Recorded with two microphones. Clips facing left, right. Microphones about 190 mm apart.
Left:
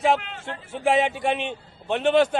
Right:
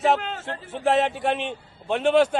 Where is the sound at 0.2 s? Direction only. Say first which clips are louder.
Right 4 dB; 40° right (ahead or behind).